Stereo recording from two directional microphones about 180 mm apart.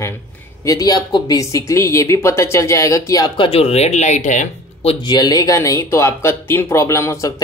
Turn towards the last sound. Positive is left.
turn(degrees=20)  # may be behind; listen again after turning